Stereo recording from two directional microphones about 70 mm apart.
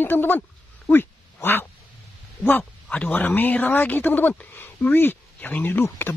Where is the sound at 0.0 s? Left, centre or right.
Left.